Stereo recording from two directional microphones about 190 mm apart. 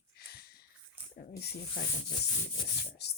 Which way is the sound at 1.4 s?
55° left (ahead or behind).